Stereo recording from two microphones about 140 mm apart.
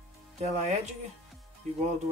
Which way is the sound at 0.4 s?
55° right (ahead or behind).